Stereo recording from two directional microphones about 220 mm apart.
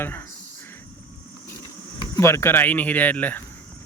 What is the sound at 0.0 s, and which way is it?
Speech, 10° left (ahead or behind).